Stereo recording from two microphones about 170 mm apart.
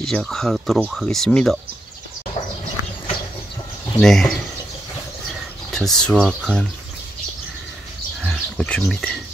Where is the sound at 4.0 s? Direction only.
Centre (ahead or behind).